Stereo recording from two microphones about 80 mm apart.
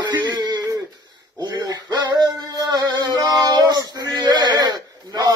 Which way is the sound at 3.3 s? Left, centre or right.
Right.